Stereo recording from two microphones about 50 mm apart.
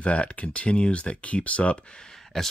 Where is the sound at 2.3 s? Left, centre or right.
Centre.